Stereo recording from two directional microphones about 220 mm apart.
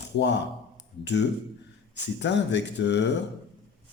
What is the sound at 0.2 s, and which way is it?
Speech, 50° left (ahead or behind).